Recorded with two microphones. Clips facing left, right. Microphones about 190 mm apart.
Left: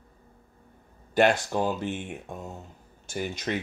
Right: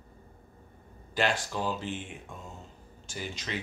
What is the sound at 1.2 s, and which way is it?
Speech, 55° left (ahead or behind).